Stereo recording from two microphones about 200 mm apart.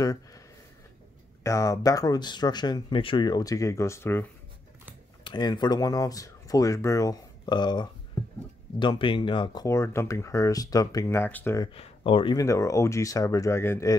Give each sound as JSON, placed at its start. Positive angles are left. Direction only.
{"t": 0.0, "sound": "speech", "side_deg": 15}
{"t": 1.4, "sound": "speech", "side_deg": 15}
{"t": 5.2, "sound": "speech", "side_deg": 20}
{"t": 11.7, "sound": "speech", "side_deg": 25}